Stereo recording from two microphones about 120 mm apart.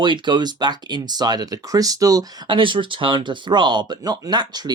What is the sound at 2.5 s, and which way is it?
Speech, 45° right (ahead or behind).